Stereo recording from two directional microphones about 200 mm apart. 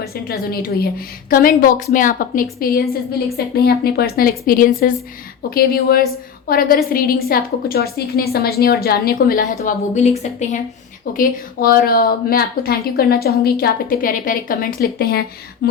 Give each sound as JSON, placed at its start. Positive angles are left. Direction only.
{"t": 0.1, "sound": "a woman's voice", "side_deg": 50}
{"t": 11.2, "sound": "a woman's voice", "side_deg": 50}